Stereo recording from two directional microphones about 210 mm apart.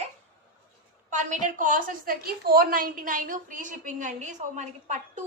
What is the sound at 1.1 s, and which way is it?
A woman's voice, 35° right (ahead or behind).